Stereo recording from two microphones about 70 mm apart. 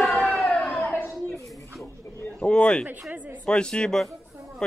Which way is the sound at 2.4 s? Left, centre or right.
Centre.